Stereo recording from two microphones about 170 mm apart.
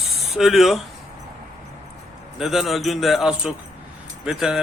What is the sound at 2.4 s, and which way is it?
Speech, centre (ahead or behind).